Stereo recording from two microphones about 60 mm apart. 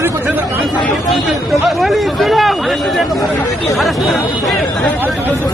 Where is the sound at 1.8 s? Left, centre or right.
Centre.